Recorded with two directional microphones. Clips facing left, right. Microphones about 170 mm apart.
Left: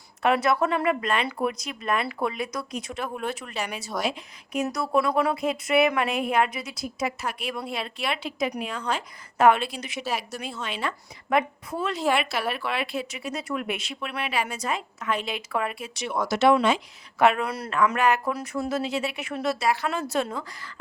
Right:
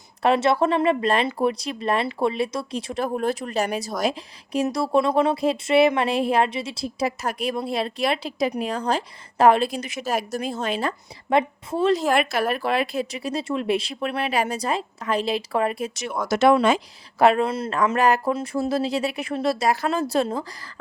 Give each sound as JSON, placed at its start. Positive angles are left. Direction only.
{"t": 0.2, "sound": "a woman's voice", "side_deg": -30}
{"t": 7.2, "sound": "a woman's voice", "side_deg": -40}
{"t": 17.8, "sound": "a woman's voice", "side_deg": -35}